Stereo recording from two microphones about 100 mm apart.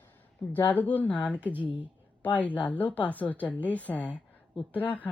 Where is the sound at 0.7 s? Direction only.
15° left (ahead or behind).